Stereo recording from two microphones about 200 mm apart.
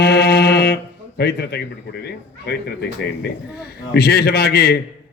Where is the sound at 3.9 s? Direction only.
50° left (ahead or behind).